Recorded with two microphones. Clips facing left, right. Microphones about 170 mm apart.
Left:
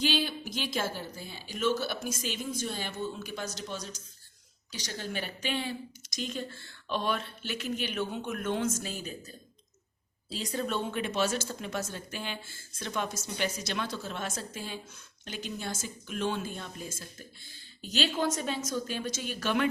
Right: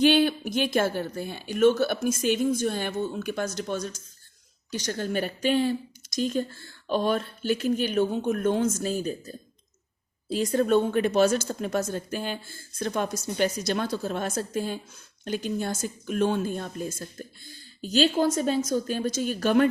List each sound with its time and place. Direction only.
0.0 s speech: 55° right (ahead or behind)